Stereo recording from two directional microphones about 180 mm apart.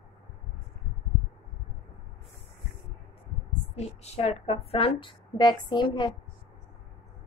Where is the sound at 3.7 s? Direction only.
35° left (ahead or behind).